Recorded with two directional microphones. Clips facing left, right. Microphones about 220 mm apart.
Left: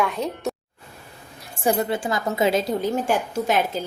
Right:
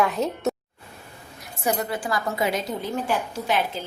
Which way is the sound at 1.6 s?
25° left (ahead or behind).